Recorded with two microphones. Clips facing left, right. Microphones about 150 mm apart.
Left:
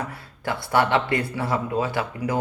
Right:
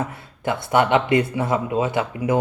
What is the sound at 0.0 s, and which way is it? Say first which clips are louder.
A man's voice: right 5 dB; 20° right (ahead or behind).